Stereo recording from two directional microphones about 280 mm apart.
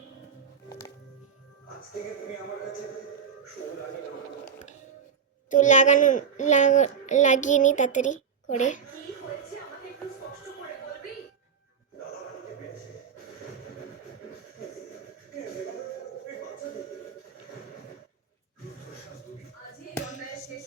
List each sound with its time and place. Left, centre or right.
5.5 s a child's voice: left